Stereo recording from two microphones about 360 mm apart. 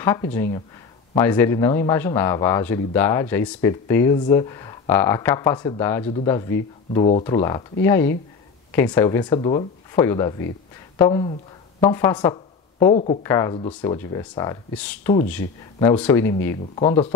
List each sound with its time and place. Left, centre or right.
0.0 s speech: centre